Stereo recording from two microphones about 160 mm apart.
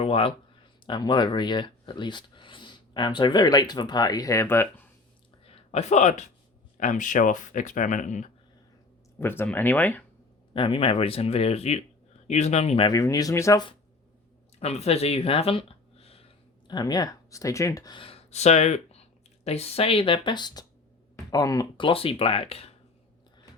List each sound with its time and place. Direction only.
0.0 s speech: 35° left (ahead or behind); by 4.9 s 15° left (ahead or behind)
5.5 s speech: 40° left (ahead or behind)
9.1 s speech: 15° left (ahead or behind)
10.5 s speech: 35° left (ahead or behind)
12.9 s speech: 20° left (ahead or behind)
14.6 s speech: 40° left (ahead or behind)
16.6 s speech: 25° left (ahead or behind)